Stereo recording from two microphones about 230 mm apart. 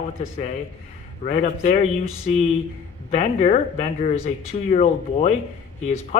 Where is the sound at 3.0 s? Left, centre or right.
Left.